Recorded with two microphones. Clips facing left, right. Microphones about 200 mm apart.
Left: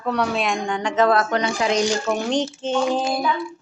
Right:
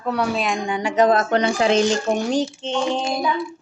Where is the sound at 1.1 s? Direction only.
25° right (ahead or behind).